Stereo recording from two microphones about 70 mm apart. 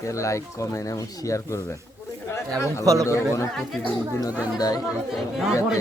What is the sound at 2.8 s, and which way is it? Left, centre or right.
Speech, right.